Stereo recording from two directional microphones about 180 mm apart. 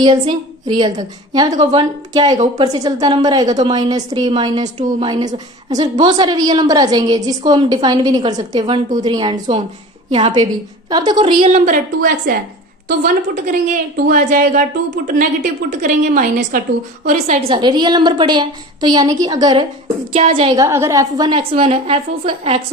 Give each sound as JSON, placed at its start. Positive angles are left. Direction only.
{"t": 0.0, "sound": "a woman's voice", "side_deg": -25}
{"t": 12.9, "sound": "a woman's voice", "side_deg": -50}
{"t": 17.5, "sound": "a woman's voice", "side_deg": -25}
{"t": 20.7, "sound": "a woman's voice", "side_deg": -15}
{"t": 21.5, "sound": "a woman's voice", "side_deg": -35}